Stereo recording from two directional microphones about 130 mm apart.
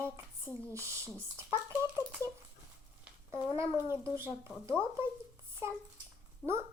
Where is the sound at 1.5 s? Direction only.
20° right (ahead or behind).